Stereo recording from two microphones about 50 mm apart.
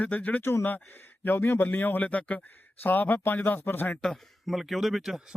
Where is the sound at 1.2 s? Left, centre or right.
Left.